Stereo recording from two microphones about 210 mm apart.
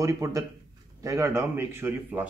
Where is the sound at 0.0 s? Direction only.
15° right (ahead or behind).